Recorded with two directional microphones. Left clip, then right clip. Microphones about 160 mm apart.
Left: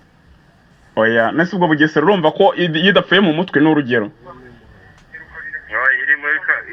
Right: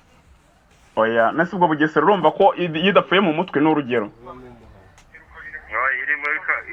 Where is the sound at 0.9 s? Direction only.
50° left (ahead or behind).